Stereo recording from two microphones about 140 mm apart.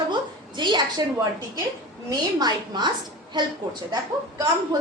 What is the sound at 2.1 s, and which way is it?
A woman's voice, 30° right (ahead or behind).